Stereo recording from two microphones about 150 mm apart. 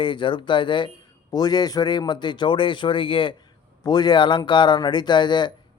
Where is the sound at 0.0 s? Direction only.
35° left (ahead or behind).